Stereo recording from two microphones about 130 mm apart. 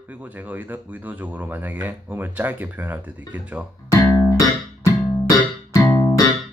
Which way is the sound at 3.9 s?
25° left (ahead or behind).